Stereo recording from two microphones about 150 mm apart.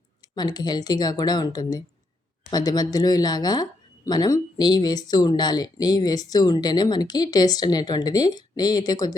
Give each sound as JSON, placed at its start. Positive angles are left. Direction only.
{"t": 0.3, "sound": "speech", "side_deg": 30}